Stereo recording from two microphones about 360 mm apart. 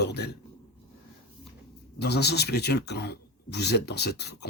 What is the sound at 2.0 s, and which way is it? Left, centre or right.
Speech, left.